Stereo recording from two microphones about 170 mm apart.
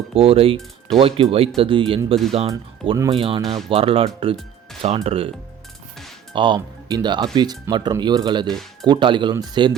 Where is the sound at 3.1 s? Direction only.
30° right (ahead or behind).